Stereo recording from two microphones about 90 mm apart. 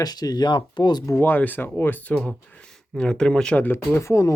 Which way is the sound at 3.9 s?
35° left (ahead or behind).